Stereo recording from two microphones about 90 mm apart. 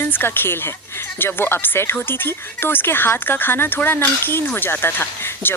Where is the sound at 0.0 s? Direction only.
25° left (ahead or behind).